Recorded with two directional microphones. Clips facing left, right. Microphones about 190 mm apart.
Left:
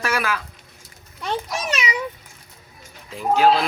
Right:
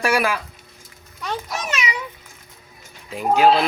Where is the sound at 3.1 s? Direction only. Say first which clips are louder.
Right 1 dB; 15° right (ahead or behind).